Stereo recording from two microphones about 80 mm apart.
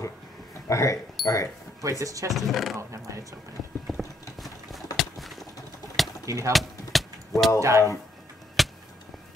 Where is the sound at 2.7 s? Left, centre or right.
Right.